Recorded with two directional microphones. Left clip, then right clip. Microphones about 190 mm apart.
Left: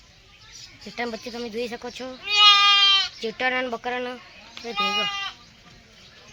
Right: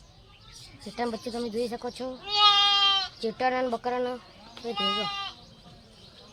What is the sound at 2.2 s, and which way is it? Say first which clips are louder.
Goat: left 6 dB; 30° right (ahead or behind).